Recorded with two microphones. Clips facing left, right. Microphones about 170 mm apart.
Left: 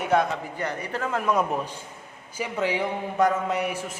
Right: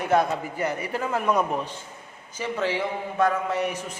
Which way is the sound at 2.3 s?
15° left (ahead or behind).